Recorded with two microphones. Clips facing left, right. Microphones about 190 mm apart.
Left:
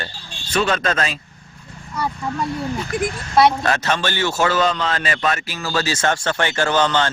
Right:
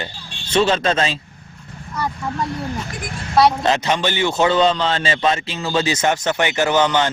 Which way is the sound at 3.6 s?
20° right (ahead or behind).